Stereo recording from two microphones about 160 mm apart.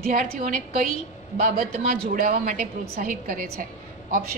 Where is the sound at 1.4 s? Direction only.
60° right (ahead or behind).